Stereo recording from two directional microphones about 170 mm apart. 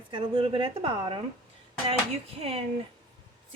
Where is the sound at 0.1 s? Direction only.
30° right (ahead or behind).